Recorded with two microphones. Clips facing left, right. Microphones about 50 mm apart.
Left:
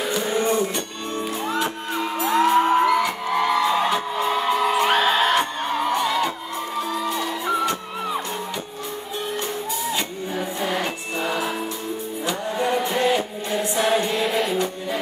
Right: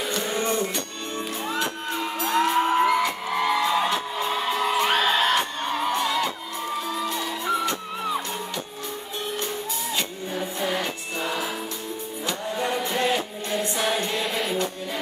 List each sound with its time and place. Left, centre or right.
0.0 s music: centre
9.9 s music: centre